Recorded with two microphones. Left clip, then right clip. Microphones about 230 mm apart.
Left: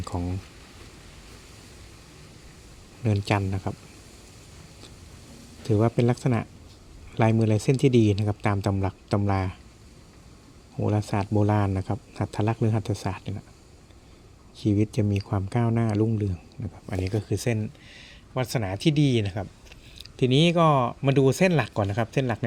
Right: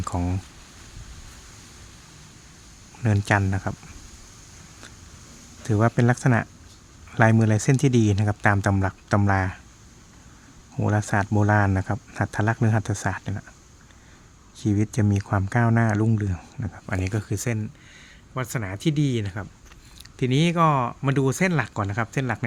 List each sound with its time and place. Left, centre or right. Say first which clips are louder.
0.1 s speech: right 4 dB; right
3.0 s speech: right 4 dB; centre
5.6 s speech: right 1 dB; centre
10.8 s speech: right 3 dB; centre
14.8 s speech: right 2 dB; centre